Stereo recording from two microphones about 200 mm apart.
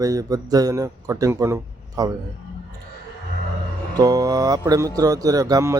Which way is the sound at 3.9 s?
20° right (ahead or behind).